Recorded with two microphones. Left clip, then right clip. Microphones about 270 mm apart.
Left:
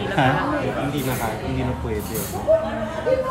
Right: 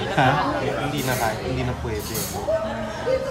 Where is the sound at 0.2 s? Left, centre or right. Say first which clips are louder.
Right 1 dB; centre.